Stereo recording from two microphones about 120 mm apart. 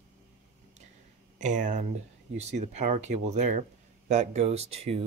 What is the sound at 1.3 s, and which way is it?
Speech, 90° right.